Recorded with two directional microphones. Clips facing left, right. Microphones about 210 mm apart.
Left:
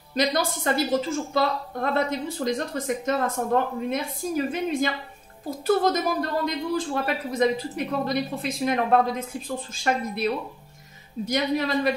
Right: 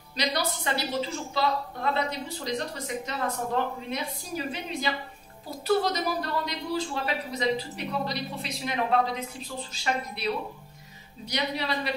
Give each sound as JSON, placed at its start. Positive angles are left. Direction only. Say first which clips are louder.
{"t": 0.1, "sound": "speech", "louder": "left 5 dB", "side_deg": 50}
{"t": 11.2, "sound": "speech", "louder": "left 6 dB", "side_deg": 50}